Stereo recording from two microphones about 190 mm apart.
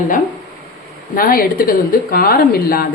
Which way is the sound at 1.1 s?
50° left (ahead or behind).